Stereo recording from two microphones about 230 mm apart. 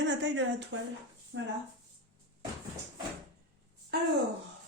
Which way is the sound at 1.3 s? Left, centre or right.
Right.